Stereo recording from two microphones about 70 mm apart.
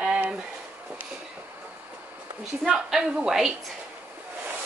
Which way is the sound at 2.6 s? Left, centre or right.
Centre.